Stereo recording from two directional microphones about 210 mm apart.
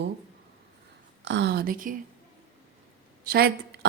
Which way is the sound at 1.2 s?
55° right (ahead or behind).